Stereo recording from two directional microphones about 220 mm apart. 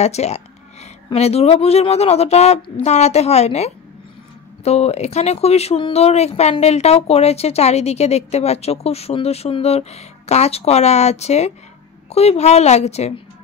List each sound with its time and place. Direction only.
0.0 s speech: 30° left (ahead or behind)